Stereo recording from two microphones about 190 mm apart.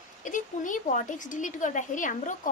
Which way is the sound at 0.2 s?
40° left (ahead or behind).